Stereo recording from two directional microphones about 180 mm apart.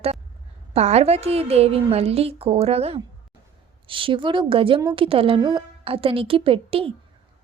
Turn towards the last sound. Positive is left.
turn(degrees=-30)  # may be behind; listen again after turning